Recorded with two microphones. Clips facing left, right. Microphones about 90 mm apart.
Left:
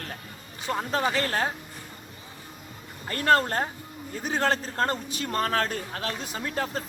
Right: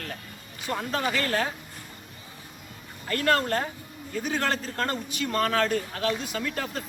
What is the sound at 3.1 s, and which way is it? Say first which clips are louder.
Speech: left 2 dB; 30° left (ahead or behind).